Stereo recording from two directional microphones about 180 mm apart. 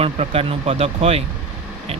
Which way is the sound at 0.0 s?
30° right (ahead or behind).